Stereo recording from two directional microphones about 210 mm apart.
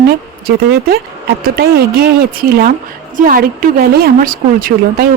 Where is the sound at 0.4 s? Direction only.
45° right (ahead or behind).